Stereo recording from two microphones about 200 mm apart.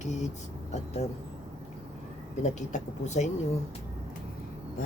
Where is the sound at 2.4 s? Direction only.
35° left (ahead or behind).